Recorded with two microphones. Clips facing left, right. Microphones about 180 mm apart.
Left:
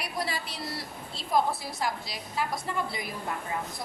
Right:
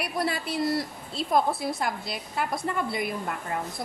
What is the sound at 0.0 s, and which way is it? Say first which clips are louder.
A woman's voice: right 5 dB; 55° right (ahead or behind).